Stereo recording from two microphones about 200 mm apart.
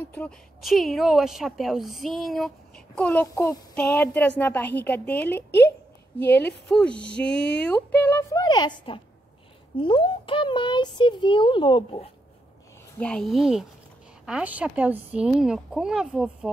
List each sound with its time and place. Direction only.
0.1 s a woman's voice: 5° left (ahead or behind); by 12.1 s 25° left (ahead or behind)
12.9 s speech: 5° left (ahead or behind)